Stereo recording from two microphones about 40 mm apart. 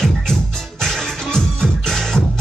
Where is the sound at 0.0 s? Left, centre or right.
Centre.